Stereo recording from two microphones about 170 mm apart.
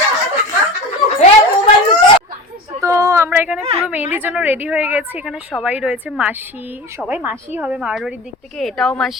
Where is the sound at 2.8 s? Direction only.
15° right (ahead or behind).